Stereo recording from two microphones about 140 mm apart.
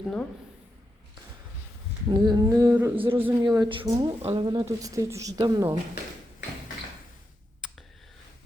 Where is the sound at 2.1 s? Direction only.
30° right (ahead or behind).